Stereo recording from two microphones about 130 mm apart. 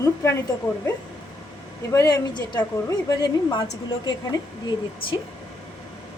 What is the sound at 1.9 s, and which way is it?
A woman's voice, 30° left (ahead or behind).